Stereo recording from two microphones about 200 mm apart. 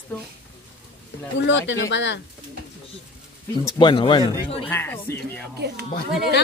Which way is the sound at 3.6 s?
25° left (ahead or behind).